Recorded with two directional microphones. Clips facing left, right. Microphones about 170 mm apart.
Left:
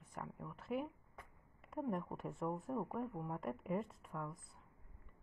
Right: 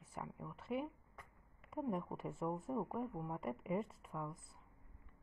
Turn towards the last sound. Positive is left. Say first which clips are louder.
# even
turn(degrees=0)  # may be behind; listen again after turning